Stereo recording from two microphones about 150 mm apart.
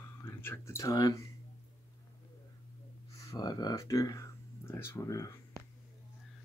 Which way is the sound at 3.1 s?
20° left (ahead or behind).